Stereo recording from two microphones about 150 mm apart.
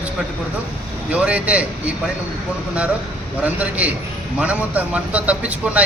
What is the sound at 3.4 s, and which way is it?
A man's voice, 10° right (ahead or behind).